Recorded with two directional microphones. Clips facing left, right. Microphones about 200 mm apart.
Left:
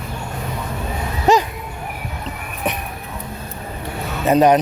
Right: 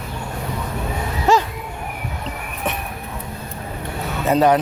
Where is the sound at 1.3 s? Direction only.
20° left (ahead or behind).